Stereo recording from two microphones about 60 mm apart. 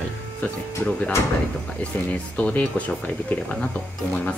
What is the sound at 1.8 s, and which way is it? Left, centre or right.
Speech, centre.